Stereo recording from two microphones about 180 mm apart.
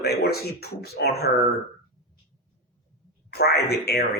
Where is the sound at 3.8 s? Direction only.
65° left (ahead or behind).